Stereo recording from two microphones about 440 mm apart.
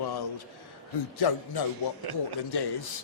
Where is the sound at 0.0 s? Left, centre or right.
Left.